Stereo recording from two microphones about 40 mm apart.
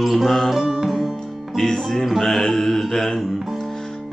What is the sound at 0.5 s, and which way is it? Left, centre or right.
Music, centre.